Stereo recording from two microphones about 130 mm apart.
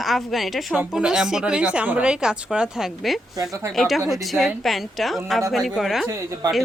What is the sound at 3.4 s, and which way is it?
Speech, 20° right (ahead or behind).